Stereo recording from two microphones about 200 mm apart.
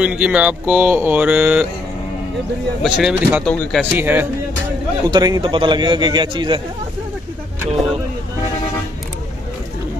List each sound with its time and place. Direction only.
0.0 s speech: 5° right (ahead or behind)
2.8 s speech: centre (ahead or behind)
4.0 s speech: 10° right (ahead or behind)
5.0 s a man's voice: 20° right (ahead or behind)